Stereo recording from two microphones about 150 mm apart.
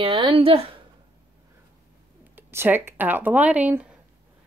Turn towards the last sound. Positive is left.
turn(degrees=-10)  # may be behind; listen again after turning